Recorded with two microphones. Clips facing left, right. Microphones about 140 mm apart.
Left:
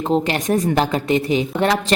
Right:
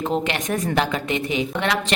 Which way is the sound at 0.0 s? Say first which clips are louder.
Left 4 dB; 35° left (ahead or behind).